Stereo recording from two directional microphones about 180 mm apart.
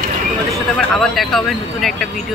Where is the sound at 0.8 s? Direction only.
Centre (ahead or behind).